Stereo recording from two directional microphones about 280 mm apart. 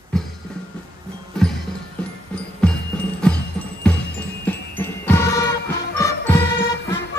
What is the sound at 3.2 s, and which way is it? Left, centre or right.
Music, centre.